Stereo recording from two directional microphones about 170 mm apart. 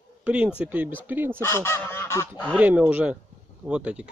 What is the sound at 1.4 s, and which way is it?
Goose, 15° left (ahead or behind).